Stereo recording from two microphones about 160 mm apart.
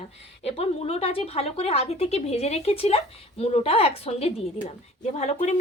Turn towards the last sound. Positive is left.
turn(degrees=45)  # may be behind; listen again after turning